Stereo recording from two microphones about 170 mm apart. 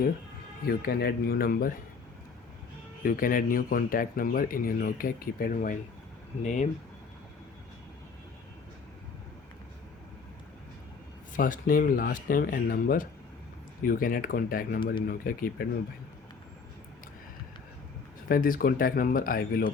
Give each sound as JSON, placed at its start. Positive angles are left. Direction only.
{"t": 0.6, "sound": "speech", "side_deg": 65}
{"t": 3.0, "sound": "speech", "side_deg": 55}
{"t": 11.3, "sound": "speech", "side_deg": 55}
{"t": 18.3, "sound": "speech", "side_deg": 55}